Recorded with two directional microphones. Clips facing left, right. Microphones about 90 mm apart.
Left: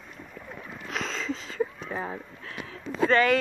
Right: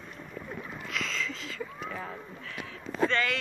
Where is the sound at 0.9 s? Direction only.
40° left (ahead or behind).